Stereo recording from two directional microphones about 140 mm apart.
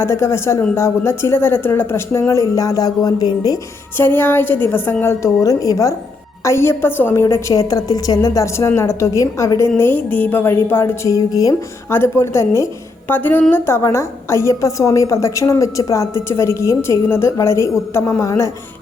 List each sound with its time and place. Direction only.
0.0 s a woman's voice: 20° left (ahead or behind)
3.9 s a woman's voice: 15° left (ahead or behind)